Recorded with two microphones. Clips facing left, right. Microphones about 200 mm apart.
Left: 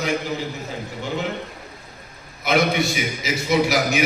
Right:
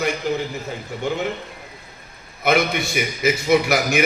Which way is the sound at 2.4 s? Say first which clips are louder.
Even; 55° right (ahead or behind).